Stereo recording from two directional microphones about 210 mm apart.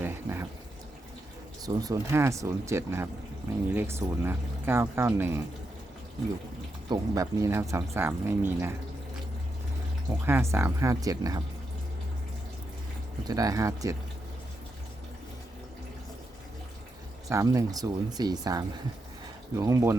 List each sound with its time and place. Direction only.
0.0 s a sound: 10° right (ahead or behind)
1.6 s speech: 15° right (ahead or behind)
6.8 s speech: 20° right (ahead or behind)
10.1 s speech: 10° right (ahead or behind)
13.2 s speech: 15° right (ahead or behind)
17.2 s speech: 15° right (ahead or behind)